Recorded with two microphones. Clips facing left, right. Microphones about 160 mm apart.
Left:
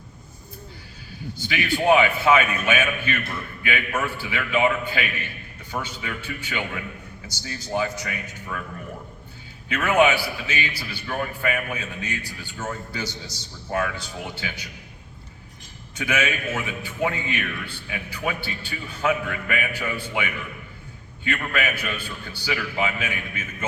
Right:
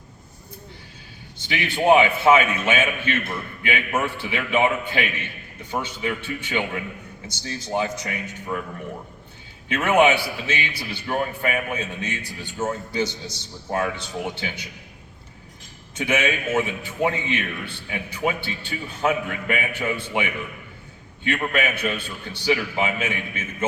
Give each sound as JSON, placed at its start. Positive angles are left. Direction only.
{"t": 1.4, "sound": "a man's voice", "side_deg": -20}
{"t": 9.6, "sound": "a man's voice", "side_deg": -20}
{"t": 16.0, "sound": "a man's voice", "side_deg": -20}
{"t": 21.2, "sound": "a man's voice", "side_deg": -25}